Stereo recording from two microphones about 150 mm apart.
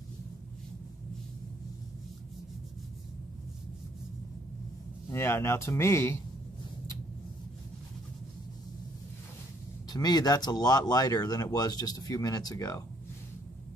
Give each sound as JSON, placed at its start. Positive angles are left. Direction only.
{"t": 5.1, "sound": "speech", "side_deg": 15}
{"t": 9.8, "sound": "speech", "side_deg": 30}